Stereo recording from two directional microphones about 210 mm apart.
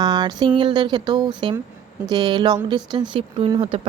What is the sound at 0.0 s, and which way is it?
A woman's voice, 20° right (ahead or behind).